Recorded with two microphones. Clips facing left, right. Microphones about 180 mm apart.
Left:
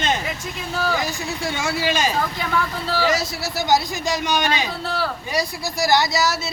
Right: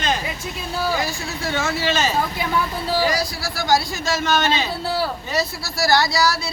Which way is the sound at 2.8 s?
15° right (ahead or behind).